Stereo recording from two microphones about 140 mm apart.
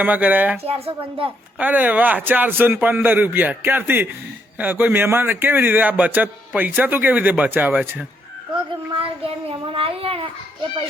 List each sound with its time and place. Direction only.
0.0 s speech: 10° right (ahead or behind)
0.6 s speech: 45° right (ahead or behind)
1.5 s speech: 10° right (ahead or behind)
8.5 s a child's voice: 40° right (ahead or behind)